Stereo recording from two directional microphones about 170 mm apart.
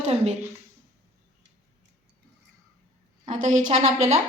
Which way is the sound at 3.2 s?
45° right (ahead or behind).